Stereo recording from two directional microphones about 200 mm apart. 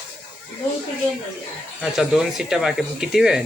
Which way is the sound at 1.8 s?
Centre (ahead or behind).